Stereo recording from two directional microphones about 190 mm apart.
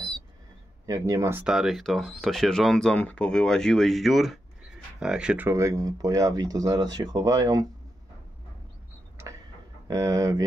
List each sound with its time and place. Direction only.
0.8 s speech: 15° right (ahead or behind)
9.8 s speech: 15° right (ahead or behind)